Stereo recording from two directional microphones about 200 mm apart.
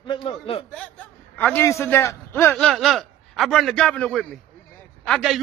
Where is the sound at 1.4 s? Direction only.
10° left (ahead or behind).